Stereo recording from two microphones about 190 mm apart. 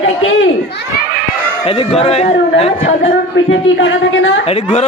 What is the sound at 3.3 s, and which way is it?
Speech, 80° left.